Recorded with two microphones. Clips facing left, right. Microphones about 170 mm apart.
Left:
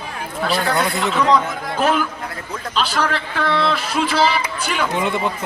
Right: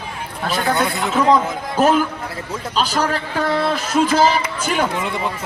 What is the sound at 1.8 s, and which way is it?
A man's voice, 40° right (ahead or behind).